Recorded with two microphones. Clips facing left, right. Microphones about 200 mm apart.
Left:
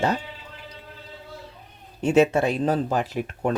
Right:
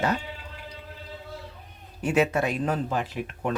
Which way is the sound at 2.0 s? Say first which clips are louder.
Left 5 dB; 25° left (ahead or behind).